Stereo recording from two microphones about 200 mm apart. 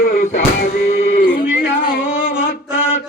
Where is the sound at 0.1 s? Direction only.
40° left (ahead or behind).